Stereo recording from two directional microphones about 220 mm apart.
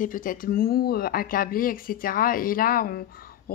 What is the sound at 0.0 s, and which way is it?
Speech, 40° left (ahead or behind).